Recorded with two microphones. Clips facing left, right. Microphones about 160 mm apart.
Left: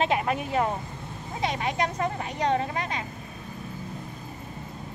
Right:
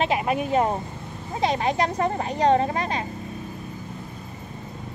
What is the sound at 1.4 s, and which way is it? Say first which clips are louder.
Speech: right 5 dB; 35° right (ahead or behind).